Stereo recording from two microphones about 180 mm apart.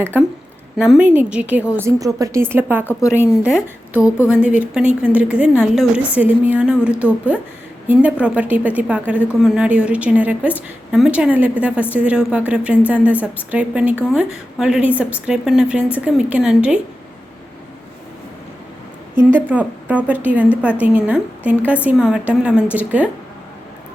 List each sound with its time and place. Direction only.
0.1 s a woman's voice: 10° right (ahead or behind)
2.8 s a woman's voice: 15° left (ahead or behind)
3.2 s a woman's voice: 5° right (ahead or behind)
19.3 s a woman's voice: 10° right (ahead or behind)